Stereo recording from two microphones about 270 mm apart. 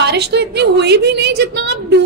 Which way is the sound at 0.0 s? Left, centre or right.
Right.